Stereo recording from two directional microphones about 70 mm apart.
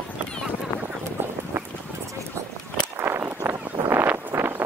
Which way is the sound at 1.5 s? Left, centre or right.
Right.